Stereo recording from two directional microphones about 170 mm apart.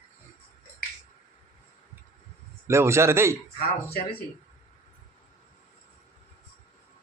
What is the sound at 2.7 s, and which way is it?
Speech, 15° right (ahead or behind).